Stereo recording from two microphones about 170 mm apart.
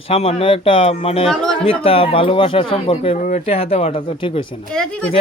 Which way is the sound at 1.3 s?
5° left (ahead or behind).